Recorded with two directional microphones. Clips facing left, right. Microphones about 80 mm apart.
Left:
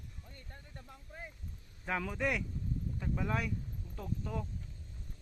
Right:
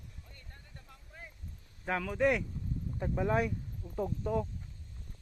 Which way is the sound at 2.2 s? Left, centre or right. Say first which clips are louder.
Right 6 dB; centre.